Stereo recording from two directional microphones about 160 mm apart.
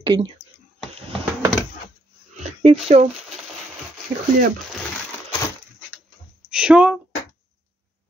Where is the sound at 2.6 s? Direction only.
40° right (ahead or behind).